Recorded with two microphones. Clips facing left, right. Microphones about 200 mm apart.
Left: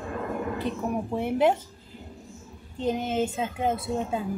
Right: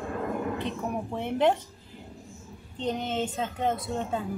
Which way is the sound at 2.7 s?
5° left (ahead or behind).